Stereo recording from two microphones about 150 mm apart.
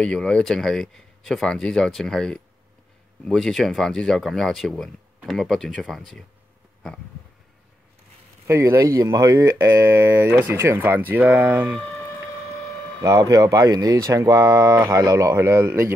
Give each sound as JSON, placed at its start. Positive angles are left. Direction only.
{"t": 0.0, "sound": "speech", "side_deg": 5}
{"t": 8.5, "sound": "speech", "side_deg": -20}
{"t": 13.0, "sound": "speech", "side_deg": -25}